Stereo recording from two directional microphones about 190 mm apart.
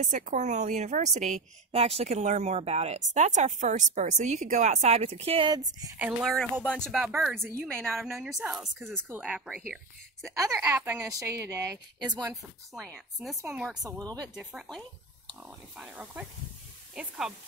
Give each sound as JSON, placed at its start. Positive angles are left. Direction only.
{"t": 0.0, "sound": "a woman's voice", "side_deg": -40}
{"t": 5.9, "sound": "speech", "side_deg": -5}
{"t": 6.6, "sound": "speech", "side_deg": 5}
{"t": 10.8, "sound": "speech", "side_deg": -5}
{"t": 11.1, "sound": "speech", "side_deg": -15}
{"t": 12.3, "sound": "speech", "side_deg": 0}
{"t": 13.4, "sound": "speech", "side_deg": -10}
{"t": 14.3, "sound": "speech", "side_deg": -5}